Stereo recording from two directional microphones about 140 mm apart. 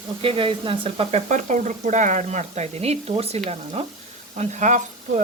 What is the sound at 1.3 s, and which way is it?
Speech, 60° right (ahead or behind).